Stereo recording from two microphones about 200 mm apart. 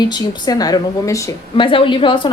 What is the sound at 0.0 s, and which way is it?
A woman's voice, 20° left (ahead or behind).